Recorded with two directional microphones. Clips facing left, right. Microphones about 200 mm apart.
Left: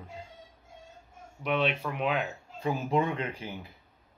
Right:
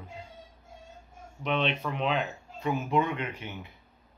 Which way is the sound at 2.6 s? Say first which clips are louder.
Even; 30° left (ahead or behind).